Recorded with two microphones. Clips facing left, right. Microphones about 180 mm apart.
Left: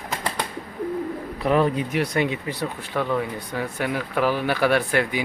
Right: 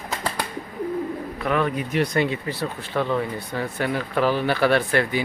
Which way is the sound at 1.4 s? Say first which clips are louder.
Left 3 dB; 35° left (ahead or behind).